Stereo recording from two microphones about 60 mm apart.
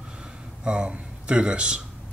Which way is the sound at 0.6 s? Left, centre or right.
Centre.